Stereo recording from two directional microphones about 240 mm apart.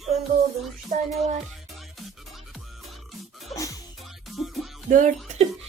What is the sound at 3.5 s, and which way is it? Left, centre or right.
Music, centre.